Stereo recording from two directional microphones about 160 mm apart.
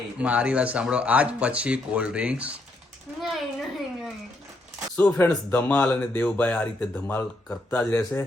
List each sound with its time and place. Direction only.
0.2 s speech: 10° right (ahead or behind)
3.2 s a sound: centre (ahead or behind)
4.9 s speech: 10° left (ahead or behind)
7.9 s speech: 15° left (ahead or behind)